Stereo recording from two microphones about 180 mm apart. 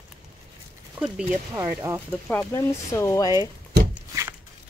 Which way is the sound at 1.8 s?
15° right (ahead or behind).